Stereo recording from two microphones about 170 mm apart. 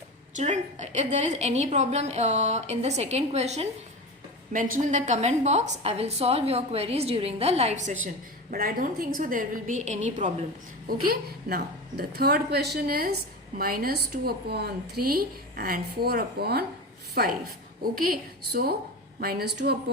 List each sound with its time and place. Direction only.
0.3 s a woman's voice: 45° right (ahead or behind)
8.0 s a woman's voice: 55° right (ahead or behind)
10.8 s a woman's voice: 60° right (ahead or behind)